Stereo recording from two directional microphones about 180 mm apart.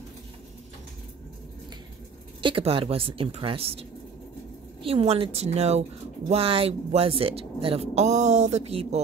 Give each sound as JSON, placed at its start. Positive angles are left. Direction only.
{"t": 2.4, "sound": "speech", "side_deg": -30}
{"t": 4.8, "sound": "speech", "side_deg": -35}